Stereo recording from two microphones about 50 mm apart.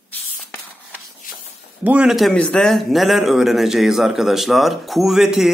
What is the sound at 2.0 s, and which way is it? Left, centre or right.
Speech, centre.